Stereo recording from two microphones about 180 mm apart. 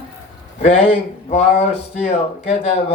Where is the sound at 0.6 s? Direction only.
35° left (ahead or behind).